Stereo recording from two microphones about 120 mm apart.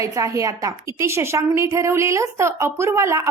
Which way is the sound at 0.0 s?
25° right (ahead or behind).